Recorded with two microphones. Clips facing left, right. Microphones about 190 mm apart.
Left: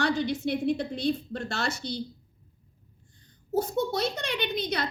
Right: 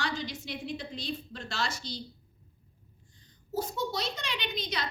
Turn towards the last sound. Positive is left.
turn(degrees=60)  # may be behind; listen again after turning